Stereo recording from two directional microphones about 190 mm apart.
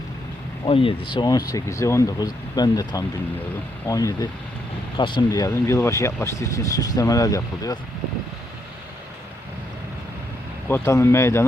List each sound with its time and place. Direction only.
0.6 s speech: 30° left (ahead or behind)
10.7 s speech: 15° left (ahead or behind)